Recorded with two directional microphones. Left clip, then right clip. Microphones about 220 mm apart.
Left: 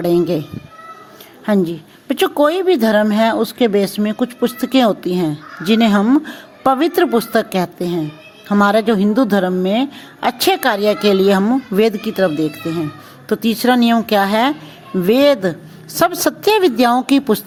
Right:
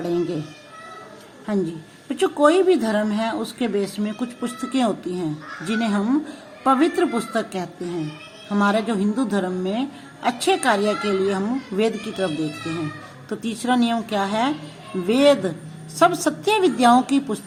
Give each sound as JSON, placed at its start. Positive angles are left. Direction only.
{"t": 0.0, "sound": "a woman's voice", "side_deg": 40}
{"t": 1.5, "sound": "a woman's voice", "side_deg": 40}